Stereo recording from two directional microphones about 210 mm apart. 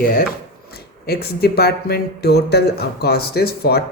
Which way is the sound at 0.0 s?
45° left (ahead or behind).